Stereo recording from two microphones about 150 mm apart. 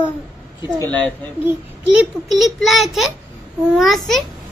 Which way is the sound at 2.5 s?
Centre (ahead or behind).